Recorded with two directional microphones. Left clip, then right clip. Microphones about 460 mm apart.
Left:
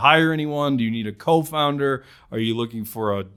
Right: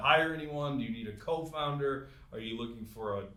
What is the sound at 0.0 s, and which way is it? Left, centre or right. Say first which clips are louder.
Speech: left 11 dB; left.